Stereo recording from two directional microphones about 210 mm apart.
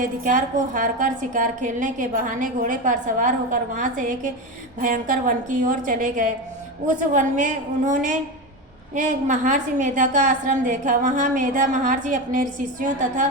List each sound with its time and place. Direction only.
0.0 s a woman's voice: 40° right (ahead or behind)